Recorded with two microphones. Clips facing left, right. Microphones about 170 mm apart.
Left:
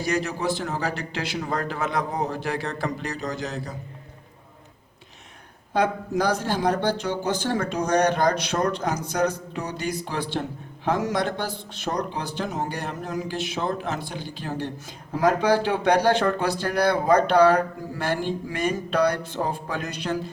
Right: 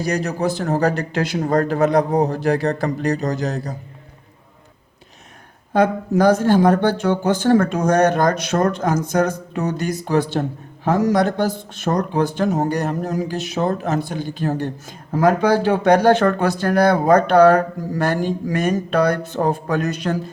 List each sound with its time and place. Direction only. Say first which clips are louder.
0.0 s a man's voice: right 4 dB; 40° right (ahead or behind)
5.7 s speech: right 6 dB; 50° right (ahead or behind)